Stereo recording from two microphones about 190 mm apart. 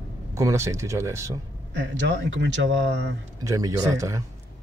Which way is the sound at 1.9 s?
70° right (ahead or behind).